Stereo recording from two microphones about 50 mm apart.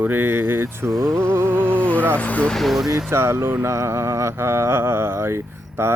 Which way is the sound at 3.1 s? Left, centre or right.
Right.